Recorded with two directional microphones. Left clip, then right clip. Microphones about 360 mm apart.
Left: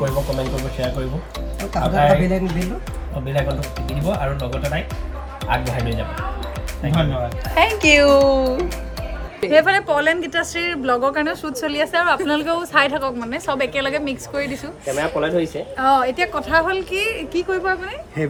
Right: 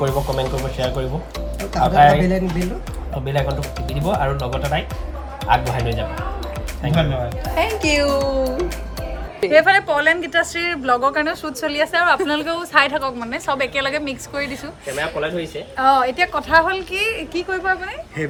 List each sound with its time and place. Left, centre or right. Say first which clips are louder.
0.0 s a woman's voice: right 1 dB; centre
7.4 s a woman's voice: left 5 dB; centre
15.1 s speech: left 4 dB; centre
15.8 s a woman's voice: right 1 dB; centre